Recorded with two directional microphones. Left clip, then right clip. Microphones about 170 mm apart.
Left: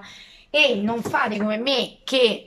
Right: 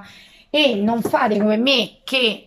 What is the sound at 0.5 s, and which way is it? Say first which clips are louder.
A woman's voice: right 2 dB; 25° right (ahead or behind).